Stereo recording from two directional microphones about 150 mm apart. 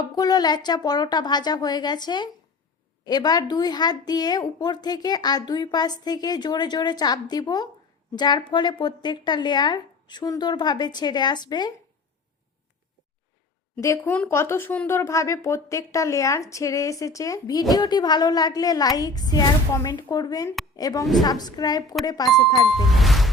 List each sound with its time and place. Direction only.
0.0 s speech: 25° left (ahead or behind)
13.8 s speech: 15° left (ahead or behind)
22.6 s speech: centre (ahead or behind)